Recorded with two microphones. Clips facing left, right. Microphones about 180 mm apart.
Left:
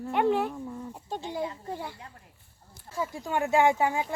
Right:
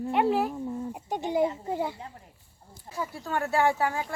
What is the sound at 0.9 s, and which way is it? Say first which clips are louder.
Speech: right 7 dB; 15° right (ahead or behind).